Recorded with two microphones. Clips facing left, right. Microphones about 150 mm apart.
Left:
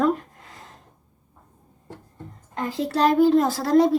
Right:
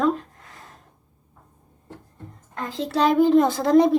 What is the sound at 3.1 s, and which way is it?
Speech, centre (ahead or behind).